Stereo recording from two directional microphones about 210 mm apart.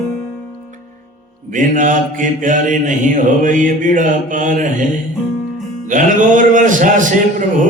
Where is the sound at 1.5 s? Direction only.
40° right (ahead or behind).